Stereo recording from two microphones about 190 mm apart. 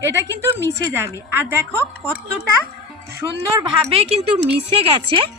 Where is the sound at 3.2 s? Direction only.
10° right (ahead or behind).